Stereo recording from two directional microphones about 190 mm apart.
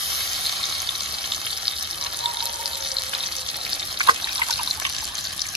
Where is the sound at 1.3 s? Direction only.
25° right (ahead or behind).